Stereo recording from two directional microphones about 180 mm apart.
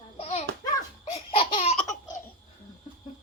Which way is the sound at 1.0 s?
35° left (ahead or behind).